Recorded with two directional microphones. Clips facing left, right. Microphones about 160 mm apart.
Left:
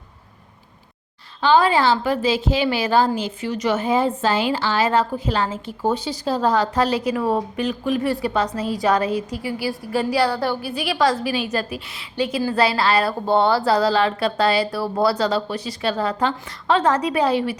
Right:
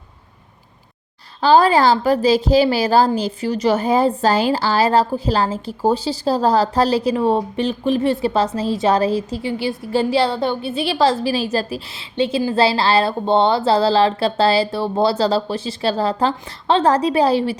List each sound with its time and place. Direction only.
1.4 s a woman's voice: 40° right (ahead or behind)